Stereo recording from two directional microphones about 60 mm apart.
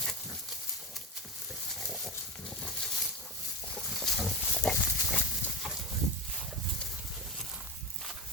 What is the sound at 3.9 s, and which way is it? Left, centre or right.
Boat, centre.